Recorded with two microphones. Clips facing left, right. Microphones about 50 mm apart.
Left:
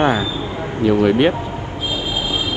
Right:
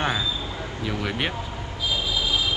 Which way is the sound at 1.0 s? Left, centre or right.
Centre.